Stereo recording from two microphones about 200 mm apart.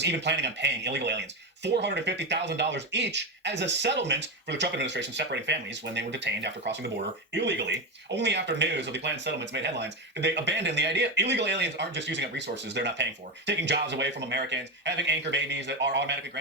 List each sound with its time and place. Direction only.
0.0 s speech: 60° right (ahead or behind)